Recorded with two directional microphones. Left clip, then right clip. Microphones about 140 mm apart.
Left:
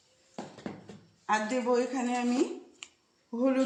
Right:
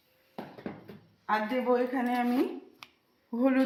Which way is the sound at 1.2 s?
35° right (ahead or behind).